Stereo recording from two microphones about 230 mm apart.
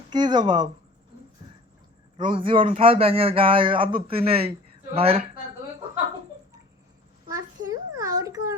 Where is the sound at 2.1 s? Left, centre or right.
Right.